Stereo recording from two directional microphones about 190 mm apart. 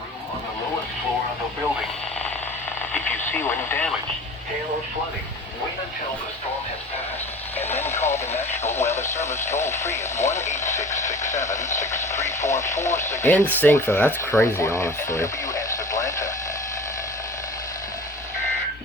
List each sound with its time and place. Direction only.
2.9 s radio: 10° left (ahead or behind)
7.6 s speech: 10° left (ahead or behind)
11.0 s a sound: 15° left (ahead or behind)
11.3 s speech: 15° left (ahead or behind)